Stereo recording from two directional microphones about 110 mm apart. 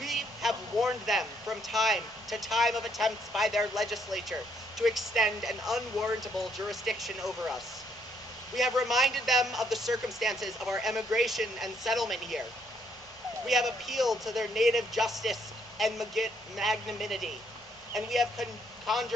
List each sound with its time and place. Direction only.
0.0 s speech: centre (ahead or behind)
13.5 s speech: centre (ahead or behind)